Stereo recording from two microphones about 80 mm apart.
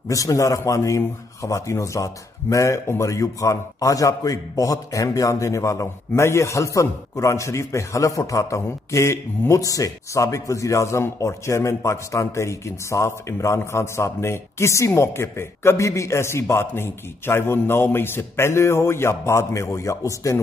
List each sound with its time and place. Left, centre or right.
0.1 s a man's voice: left